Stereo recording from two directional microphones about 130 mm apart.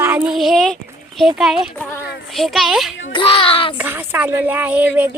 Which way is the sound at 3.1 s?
45° left (ahead or behind).